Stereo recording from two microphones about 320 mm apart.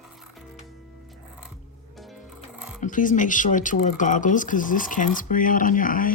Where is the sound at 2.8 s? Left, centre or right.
Left.